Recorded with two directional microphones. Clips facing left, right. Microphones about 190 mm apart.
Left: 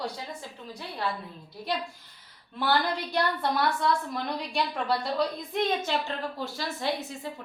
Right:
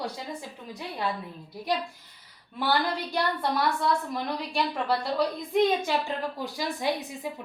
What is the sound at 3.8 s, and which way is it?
A woman's voice, centre (ahead or behind).